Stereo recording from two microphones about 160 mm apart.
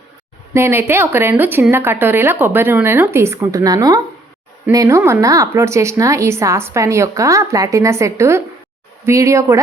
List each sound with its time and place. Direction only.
0.5 s a woman's voice: 15° right (ahead or behind)